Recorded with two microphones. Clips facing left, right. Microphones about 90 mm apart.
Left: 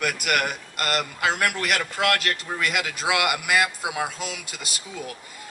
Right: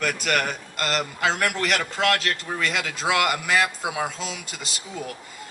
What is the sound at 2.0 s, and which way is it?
A man's voice, 5° left (ahead or behind).